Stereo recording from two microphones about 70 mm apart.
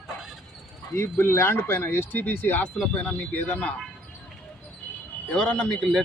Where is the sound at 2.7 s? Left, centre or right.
Centre.